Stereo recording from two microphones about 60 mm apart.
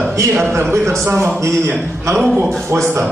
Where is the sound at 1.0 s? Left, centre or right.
Right.